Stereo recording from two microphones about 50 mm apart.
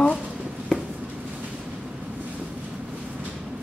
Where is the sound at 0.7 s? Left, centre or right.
Centre.